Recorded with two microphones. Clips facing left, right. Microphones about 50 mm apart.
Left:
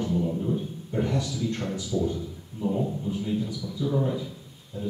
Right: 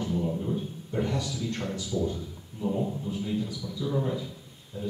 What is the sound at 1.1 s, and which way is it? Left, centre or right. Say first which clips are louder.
A man's voice: left 3 dB; left.